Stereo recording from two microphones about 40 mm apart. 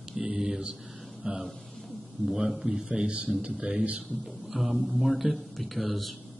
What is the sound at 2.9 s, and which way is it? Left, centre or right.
Speech, right.